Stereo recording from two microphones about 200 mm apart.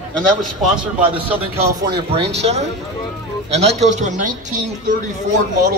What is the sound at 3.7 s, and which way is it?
Speech, 35° right (ahead or behind).